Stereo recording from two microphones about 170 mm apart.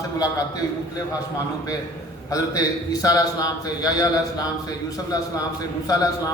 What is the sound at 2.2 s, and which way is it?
A man's voice, 20° left (ahead or behind).